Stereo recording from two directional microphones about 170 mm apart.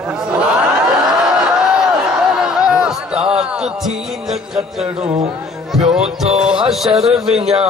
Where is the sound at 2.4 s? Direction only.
5° right (ahead or behind).